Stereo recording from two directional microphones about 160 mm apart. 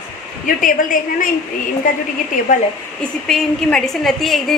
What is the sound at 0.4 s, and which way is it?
A woman's voice, 55° left (ahead or behind).